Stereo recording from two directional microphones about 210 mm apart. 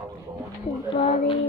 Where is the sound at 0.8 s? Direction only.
25° left (ahead or behind).